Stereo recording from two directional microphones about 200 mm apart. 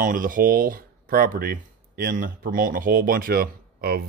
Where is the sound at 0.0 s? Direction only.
45° right (ahead or behind).